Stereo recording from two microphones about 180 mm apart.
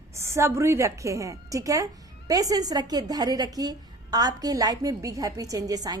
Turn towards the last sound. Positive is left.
turn(degrees=-20)  # may be behind; listen again after turning